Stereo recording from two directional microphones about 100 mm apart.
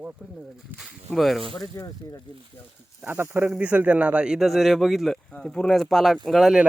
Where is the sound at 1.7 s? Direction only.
35° left (ahead or behind).